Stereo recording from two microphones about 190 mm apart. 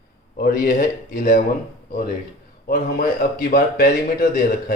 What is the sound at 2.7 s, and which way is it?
A man's voice, 50° left (ahead or behind).